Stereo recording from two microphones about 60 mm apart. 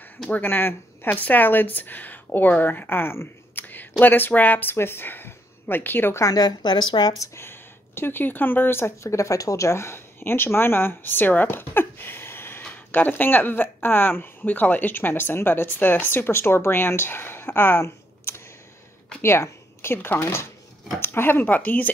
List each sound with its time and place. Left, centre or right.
0.3 s speech: left
6.1 s a woman's voice: left
7.3 s speech: left
17.8 s a sound: left
19.2 s speech: left